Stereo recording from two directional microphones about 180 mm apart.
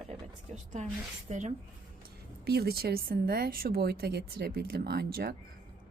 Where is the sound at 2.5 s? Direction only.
60° right (ahead or behind).